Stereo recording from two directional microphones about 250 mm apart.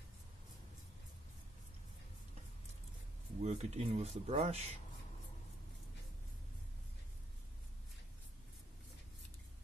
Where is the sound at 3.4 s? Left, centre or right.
Right.